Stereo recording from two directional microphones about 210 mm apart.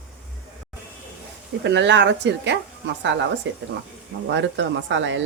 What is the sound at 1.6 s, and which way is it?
Speech, 55° right (ahead or behind).